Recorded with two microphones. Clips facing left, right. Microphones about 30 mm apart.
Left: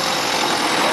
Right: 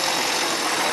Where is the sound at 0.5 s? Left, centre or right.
Left.